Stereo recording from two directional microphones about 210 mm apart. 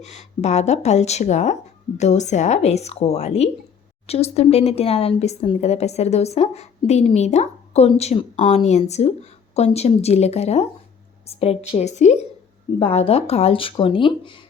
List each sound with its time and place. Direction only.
0.0 s speech: 30° left (ahead or behind)